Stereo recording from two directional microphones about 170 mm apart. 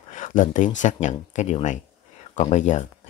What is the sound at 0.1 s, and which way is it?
Speech, 50° left (ahead or behind).